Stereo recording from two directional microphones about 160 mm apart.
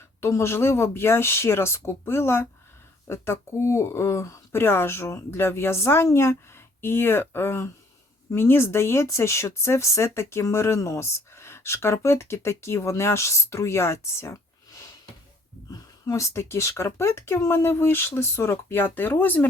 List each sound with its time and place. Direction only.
0.2 s speech: 15° left (ahead or behind)
15.7 s speech: 20° left (ahead or behind)